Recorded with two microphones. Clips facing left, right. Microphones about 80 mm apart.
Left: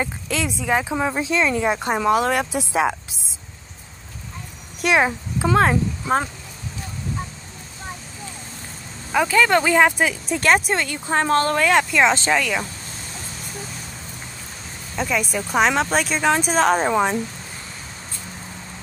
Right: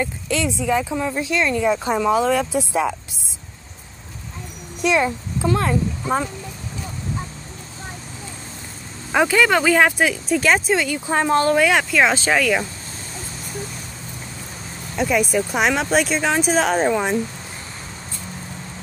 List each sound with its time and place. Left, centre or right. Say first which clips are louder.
0.4 s speech: right 1 dB; left
1.2 s speech: right 2 dB; left
2.0 s speech: even; left
4.8 s a child's voice: even; left
9.1 s speech: right 1 dB; centre
11.1 s speech: right 1 dB; centre
11.6 s speech: even; centre
15.0 s speech: right 4 dB; centre